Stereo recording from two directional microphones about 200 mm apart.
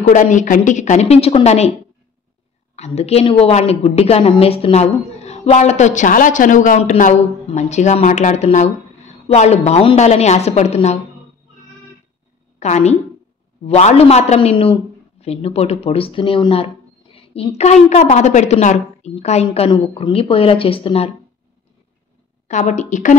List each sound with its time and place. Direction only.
0.0 s a woman's voice: 40° left (ahead or behind)
2.7 s a woman's voice: 30° left (ahead or behind)
12.5 s a woman's voice: 35° left (ahead or behind)
22.5 s a woman's voice: 35° left (ahead or behind)